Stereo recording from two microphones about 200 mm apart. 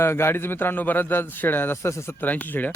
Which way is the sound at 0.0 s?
10° left (ahead or behind).